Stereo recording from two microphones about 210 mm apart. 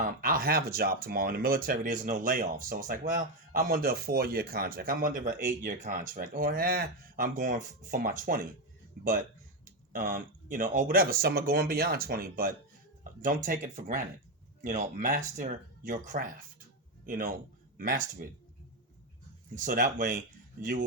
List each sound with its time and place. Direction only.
0.2 s speech: 45° right (ahead or behind)
9.9 s speech: 45° right (ahead or behind)
19.5 s speech: 40° right (ahead or behind)